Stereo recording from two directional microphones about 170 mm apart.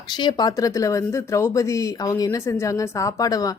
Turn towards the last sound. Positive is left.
turn(degrees=20)  # may be behind; listen again after turning